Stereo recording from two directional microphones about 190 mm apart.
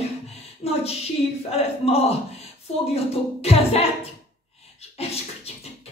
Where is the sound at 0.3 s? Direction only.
35° left (ahead or behind).